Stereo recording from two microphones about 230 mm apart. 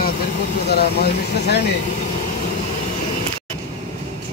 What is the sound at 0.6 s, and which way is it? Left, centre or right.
Speech, left.